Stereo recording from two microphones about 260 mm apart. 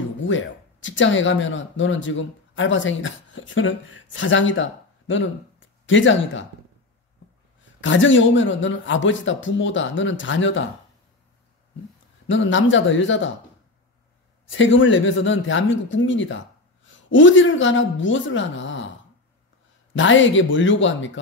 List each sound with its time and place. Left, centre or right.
0.2 s speech: left
7.6 s speech: left
12.3 s speech: left
14.5 s speech: left
19.9 s speech: left